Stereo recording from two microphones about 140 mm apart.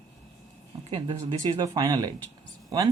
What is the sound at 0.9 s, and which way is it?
Speech, 35° right (ahead or behind).